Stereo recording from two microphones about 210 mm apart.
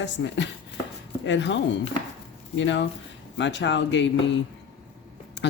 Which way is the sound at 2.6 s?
60° left (ahead or behind).